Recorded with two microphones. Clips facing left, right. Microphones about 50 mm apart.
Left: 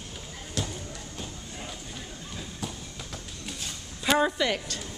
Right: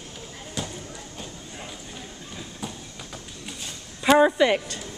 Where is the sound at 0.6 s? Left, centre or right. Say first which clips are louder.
Even; centre.